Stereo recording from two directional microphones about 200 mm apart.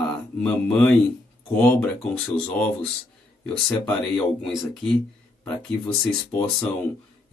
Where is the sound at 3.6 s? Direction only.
5° left (ahead or behind).